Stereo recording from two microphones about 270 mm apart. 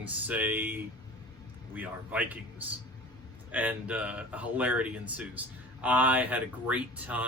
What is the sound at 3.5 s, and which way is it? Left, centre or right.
Speech, centre.